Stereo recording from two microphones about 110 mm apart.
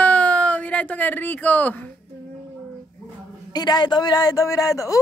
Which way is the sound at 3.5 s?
40° left (ahead or behind).